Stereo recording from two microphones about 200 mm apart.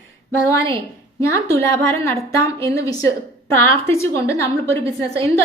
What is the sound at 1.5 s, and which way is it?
A woman's voice, 15° left (ahead or behind).